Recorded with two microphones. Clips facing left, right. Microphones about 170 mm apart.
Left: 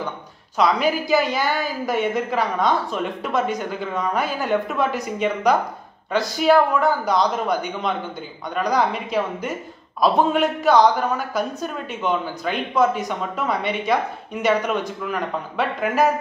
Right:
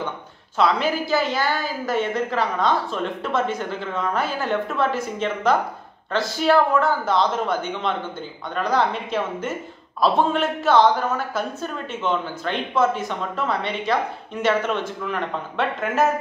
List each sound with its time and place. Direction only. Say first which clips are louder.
0.6 s speech: left 1 dB; 10° left (ahead or behind)